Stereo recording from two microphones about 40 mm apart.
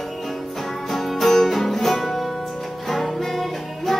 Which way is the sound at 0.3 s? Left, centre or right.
Centre.